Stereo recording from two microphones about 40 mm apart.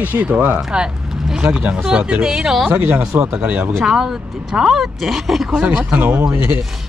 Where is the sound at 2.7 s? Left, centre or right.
Right.